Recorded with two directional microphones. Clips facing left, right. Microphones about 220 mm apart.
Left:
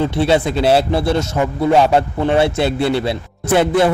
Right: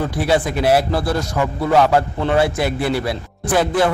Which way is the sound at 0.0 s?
25° left (ahead or behind).